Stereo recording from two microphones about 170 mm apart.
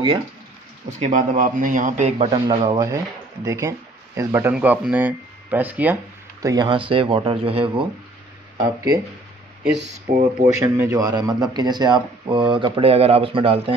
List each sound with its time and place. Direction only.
0.8 s a man's voice: 45° right (ahead or behind)
2.3 s speech: 30° right (ahead or behind); by 5.9 s 10° right (ahead or behind)
6.4 s speech: 25° right (ahead or behind)
8.5 s speech: 20° right (ahead or behind)
10.1 s speech: 60° right (ahead or behind)
10.4 s speech: 15° right (ahead or behind); by 13.7 s 35° right (ahead or behind)